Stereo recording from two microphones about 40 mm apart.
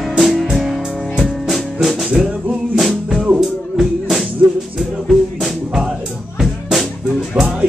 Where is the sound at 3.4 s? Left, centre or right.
Centre.